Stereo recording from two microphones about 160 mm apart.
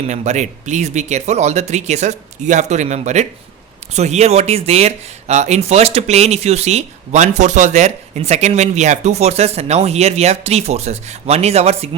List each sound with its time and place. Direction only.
0.1 s speech: 45° right (ahead or behind)